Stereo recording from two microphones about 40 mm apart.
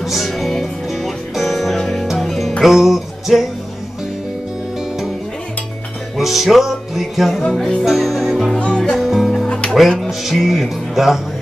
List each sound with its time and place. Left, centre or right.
0.0 s music: centre
6.1 s music: centre
8.6 s music: centre
8.9 s music: centre
9.5 s music: left
9.8 s music: centre